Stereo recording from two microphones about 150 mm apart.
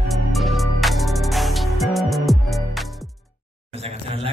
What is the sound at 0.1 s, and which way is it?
Music, centre (ahead or behind).